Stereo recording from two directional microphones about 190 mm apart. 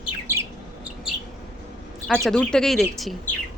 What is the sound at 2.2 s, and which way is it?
Speech, 5° left (ahead or behind).